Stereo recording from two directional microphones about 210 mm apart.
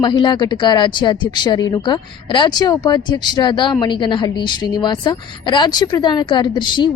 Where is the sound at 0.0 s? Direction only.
20° left (ahead or behind).